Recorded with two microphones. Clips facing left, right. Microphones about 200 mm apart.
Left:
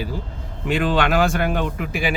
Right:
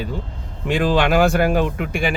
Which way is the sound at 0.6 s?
Centre (ahead or behind).